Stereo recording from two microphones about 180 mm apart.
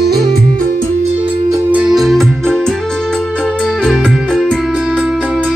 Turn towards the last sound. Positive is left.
turn(degrees=-5)  # may be behind; listen again after turning